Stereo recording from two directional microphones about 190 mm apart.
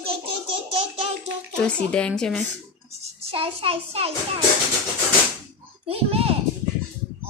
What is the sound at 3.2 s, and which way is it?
A child's voice, 30° right (ahead or behind).